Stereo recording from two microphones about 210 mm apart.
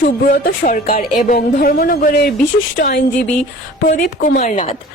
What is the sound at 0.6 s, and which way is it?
Speech, 40° left (ahead or behind).